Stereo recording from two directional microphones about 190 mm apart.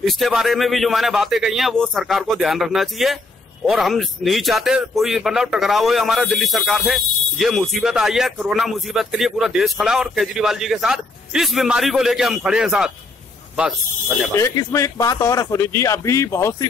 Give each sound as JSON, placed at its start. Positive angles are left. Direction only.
{"t": 0.0, "sound": "a man's voice", "side_deg": 0}
{"t": 14.3, "sound": "speech", "side_deg": 15}